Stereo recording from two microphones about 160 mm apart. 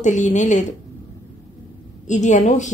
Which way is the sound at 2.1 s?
50° left (ahead or behind).